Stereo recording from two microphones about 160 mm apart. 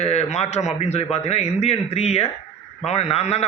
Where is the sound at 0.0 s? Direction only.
45° left (ahead or behind).